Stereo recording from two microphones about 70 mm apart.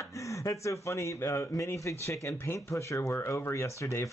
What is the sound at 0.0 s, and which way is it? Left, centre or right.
Speech, left.